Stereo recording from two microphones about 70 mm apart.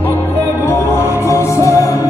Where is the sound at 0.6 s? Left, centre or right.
Left.